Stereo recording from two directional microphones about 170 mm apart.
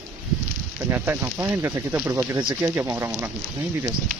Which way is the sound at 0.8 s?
15° right (ahead or behind).